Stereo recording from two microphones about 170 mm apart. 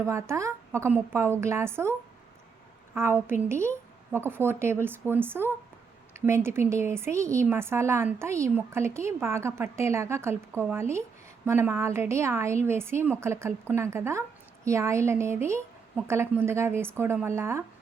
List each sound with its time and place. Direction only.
0.0 s a woman's voice: 15° right (ahead or behind)